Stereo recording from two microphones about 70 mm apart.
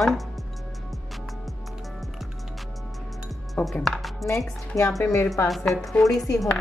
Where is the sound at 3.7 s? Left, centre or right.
Centre.